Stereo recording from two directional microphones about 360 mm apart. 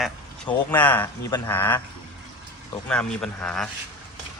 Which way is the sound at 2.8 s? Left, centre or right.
Centre.